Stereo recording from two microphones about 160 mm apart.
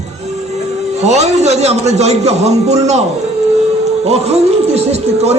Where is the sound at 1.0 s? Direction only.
45° right (ahead or behind).